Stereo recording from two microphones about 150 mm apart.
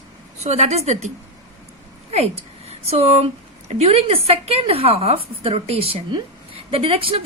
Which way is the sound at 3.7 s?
45° right (ahead or behind).